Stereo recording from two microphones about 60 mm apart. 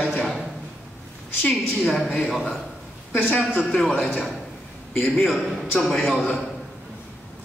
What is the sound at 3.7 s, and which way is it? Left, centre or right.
A man's voice, centre.